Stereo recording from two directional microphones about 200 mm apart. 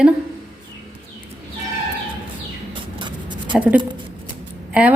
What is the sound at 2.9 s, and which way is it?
Writing, 25° right (ahead or behind).